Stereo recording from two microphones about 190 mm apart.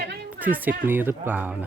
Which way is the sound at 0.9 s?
10° right (ahead or behind).